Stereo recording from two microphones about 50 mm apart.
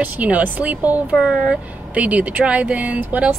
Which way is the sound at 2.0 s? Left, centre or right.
Right.